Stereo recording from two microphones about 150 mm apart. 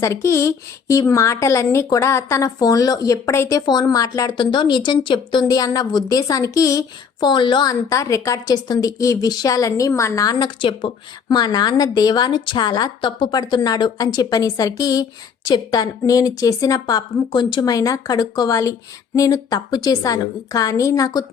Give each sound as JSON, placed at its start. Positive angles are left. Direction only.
{"t": 0.0, "sound": "a woman's voice", "side_deg": 20}